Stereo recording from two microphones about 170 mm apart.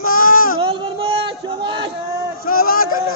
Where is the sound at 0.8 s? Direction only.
35° right (ahead or behind).